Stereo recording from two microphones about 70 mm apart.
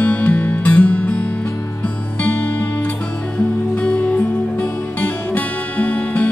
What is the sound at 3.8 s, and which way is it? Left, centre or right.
Music, centre.